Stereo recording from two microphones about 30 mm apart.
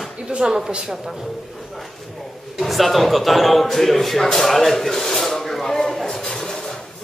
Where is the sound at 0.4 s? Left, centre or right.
Right.